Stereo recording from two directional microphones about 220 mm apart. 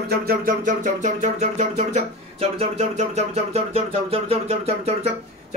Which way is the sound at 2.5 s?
30° right (ahead or behind).